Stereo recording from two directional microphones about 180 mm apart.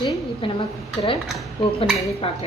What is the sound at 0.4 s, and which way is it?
Speech, 35° left (ahead or behind).